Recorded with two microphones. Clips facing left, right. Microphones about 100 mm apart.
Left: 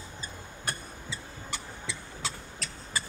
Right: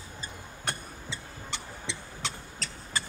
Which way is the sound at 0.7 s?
25° right (ahead or behind).